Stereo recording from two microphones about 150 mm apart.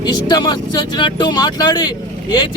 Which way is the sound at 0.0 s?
25° left (ahead or behind).